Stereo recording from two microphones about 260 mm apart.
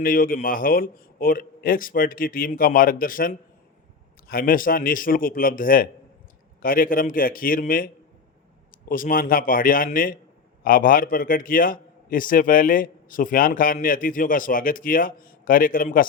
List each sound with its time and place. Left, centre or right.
0.0 s a man's voice: left
8.9 s a man's voice: left